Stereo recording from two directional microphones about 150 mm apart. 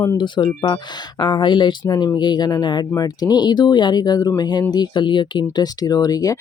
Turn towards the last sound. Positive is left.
turn(degrees=25)  # may be behind; listen again after turning